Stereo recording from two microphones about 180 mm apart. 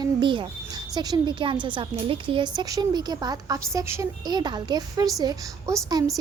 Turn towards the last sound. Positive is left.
turn(degrees=-20)  # may be behind; listen again after turning